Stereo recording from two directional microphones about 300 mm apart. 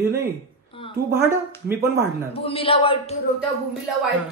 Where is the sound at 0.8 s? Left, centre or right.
Centre.